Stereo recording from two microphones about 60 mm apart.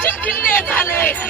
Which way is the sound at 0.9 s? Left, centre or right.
Left.